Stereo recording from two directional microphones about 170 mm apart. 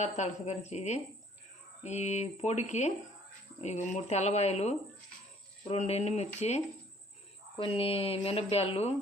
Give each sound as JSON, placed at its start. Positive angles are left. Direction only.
{"t": 0.0, "sound": "speech", "side_deg": 40}
{"t": 7.6, "sound": "speech", "side_deg": 35}